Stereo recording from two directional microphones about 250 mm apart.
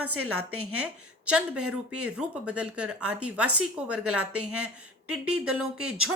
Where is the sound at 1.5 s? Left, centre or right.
Right.